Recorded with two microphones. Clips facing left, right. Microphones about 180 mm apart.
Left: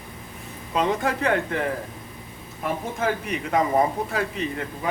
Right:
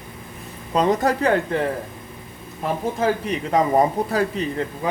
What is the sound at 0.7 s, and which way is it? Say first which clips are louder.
Speech: right 4 dB; 40° right (ahead or behind).